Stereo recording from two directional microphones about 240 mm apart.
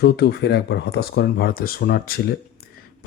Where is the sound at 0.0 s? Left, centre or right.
Left.